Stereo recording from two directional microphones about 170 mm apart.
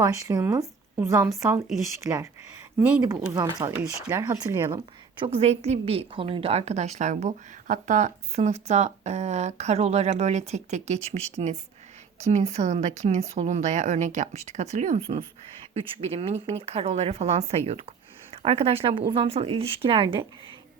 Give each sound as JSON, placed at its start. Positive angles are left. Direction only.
{"t": 0.0, "sound": "speech", "side_deg": -20}
{"t": 3.3, "sound": "speech", "side_deg": -20}
{"t": 5.2, "sound": "a woman's voice", "side_deg": -35}